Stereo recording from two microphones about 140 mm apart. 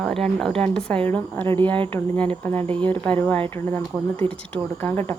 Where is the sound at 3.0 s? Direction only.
10° left (ahead or behind).